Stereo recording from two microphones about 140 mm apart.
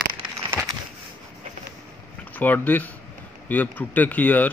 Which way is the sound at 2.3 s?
15° left (ahead or behind).